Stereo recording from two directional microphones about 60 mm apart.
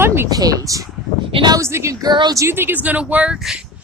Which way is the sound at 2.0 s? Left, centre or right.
Right.